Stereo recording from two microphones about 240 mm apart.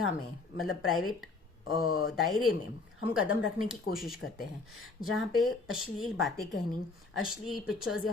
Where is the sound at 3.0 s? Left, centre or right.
Left.